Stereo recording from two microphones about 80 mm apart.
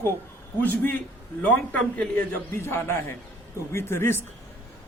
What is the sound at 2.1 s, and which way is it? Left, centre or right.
A man's voice, left.